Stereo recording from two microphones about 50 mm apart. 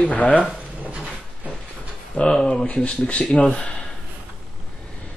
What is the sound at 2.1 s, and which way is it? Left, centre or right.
Speech, centre.